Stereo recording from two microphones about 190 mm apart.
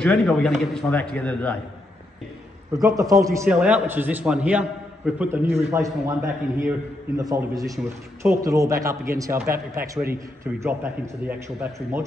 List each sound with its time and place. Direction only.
0.0 s a man's voice: 5° left (ahead or behind)
2.8 s a man's voice: 20° right (ahead or behind)
3.4 s a man's voice: 5° right (ahead or behind)